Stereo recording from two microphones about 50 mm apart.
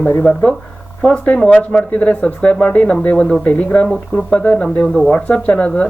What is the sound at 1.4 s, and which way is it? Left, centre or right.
Speech, left.